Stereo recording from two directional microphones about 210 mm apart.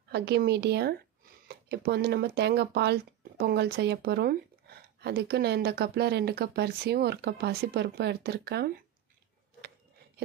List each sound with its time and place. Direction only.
0.1 s speech: 50° right (ahead or behind)